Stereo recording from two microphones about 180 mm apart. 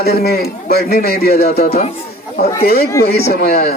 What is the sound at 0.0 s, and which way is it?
A man's voice, 60° left (ahead or behind).